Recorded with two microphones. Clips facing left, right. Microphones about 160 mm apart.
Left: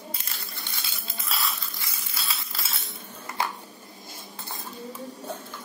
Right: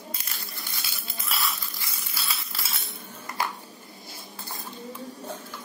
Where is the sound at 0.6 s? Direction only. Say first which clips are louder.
Even; 25° left (ahead or behind).